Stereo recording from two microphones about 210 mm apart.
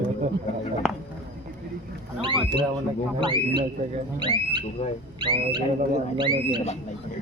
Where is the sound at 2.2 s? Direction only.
25° right (ahead or behind).